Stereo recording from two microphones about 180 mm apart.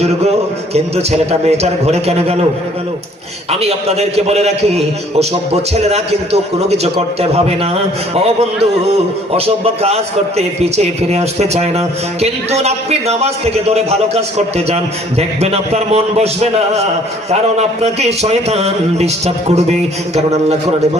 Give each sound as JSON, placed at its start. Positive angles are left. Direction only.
{"t": 0.0, "sound": "speech", "side_deg": -35}
{"t": 3.6, "sound": "a man's voice", "side_deg": -35}
{"t": 17.8, "sound": "a man's voice", "side_deg": -35}